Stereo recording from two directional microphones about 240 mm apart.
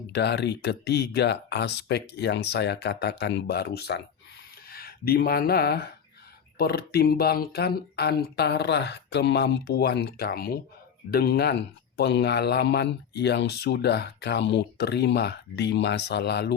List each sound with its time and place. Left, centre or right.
0.1 s speech: left